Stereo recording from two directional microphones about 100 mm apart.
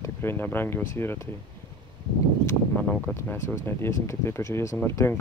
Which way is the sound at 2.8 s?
15° left (ahead or behind).